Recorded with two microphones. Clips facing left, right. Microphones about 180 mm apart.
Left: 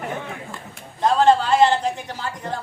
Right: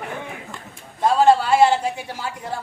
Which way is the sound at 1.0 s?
10° right (ahead or behind).